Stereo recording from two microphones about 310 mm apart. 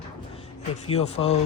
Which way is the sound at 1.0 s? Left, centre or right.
Centre.